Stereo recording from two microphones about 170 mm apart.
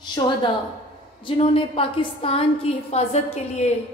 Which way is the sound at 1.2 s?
30° left (ahead or behind).